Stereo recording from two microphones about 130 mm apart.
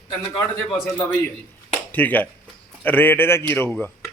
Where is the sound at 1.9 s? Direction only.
15° left (ahead or behind).